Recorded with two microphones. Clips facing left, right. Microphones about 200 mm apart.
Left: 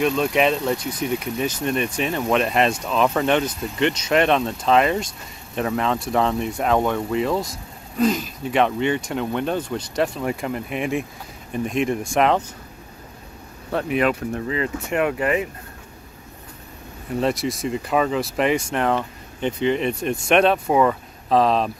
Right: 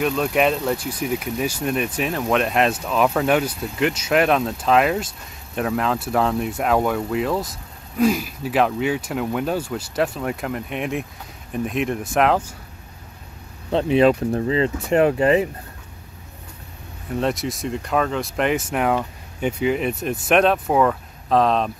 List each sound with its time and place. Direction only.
0.0 s speech: centre (ahead or behind)
13.7 s speech: 25° right (ahead or behind)
17.2 s speech: centre (ahead or behind)